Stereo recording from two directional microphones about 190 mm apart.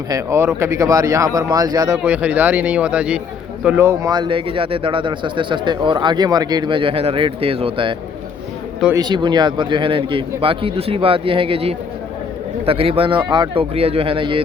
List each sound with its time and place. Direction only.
0.1 s speech: 15° right (ahead or behind)
2.0 s a man's voice: 5° right (ahead or behind); by 7.9 s 30° right (ahead or behind)
9.0 s a man's voice: 25° right (ahead or behind)